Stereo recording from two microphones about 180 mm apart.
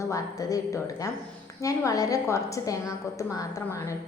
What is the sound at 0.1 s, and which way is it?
A woman's voice, 20° left (ahead or behind).